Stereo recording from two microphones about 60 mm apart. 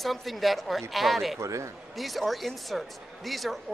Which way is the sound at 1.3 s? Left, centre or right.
Right.